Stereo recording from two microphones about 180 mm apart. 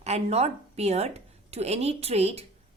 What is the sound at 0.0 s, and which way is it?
A woman's voice, 35° right (ahead or behind).